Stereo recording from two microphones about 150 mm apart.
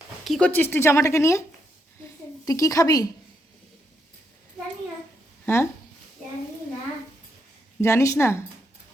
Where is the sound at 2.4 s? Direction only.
20° left (ahead or behind).